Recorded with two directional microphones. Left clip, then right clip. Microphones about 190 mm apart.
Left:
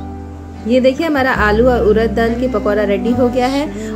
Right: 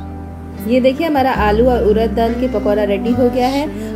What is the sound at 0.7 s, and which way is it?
A woman's voice, 25° left (ahead or behind).